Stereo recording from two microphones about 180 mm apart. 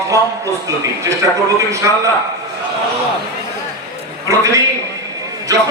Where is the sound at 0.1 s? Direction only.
15° right (ahead or behind).